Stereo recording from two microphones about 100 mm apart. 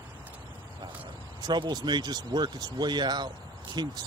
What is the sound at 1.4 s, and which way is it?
Speech, 45° right (ahead or behind).